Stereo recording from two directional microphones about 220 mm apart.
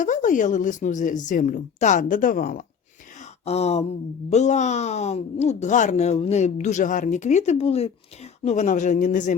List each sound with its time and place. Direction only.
0.0 s speech: 35° left (ahead or behind)
3.4 s a sound: 30° left (ahead or behind)
4.3 s speech: 30° left (ahead or behind)